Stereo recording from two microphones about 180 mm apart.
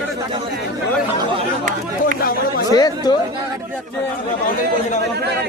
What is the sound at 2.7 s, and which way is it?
Speech, 20° left (ahead or behind).